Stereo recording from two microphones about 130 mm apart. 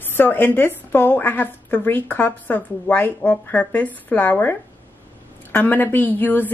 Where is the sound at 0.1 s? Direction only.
15° left (ahead or behind).